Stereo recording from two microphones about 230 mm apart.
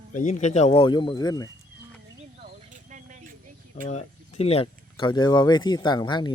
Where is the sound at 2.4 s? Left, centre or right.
Right.